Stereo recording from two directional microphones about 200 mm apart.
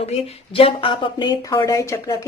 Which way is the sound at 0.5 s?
25° left (ahead or behind).